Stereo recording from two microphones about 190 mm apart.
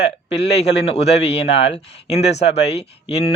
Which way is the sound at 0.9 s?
35° left (ahead or behind).